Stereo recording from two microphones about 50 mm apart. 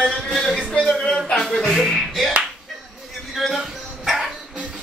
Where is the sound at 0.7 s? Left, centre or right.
Centre.